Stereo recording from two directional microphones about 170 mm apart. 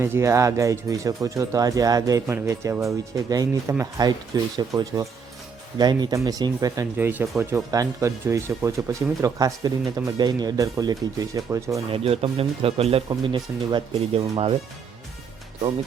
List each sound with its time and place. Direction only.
0.0 s speech: 15° right (ahead or behind)
11.9 s speech: 35° right (ahead or behind)